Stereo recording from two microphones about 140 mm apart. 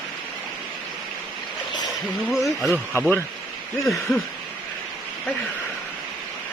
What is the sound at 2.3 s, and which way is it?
Speech, centre (ahead or behind).